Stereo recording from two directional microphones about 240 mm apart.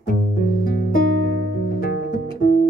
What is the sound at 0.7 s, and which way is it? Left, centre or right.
Music, left.